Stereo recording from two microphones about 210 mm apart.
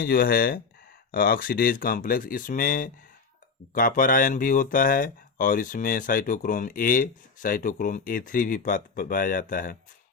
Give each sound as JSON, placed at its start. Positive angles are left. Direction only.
{"t": 0.0, "sound": "speech", "side_deg": 45}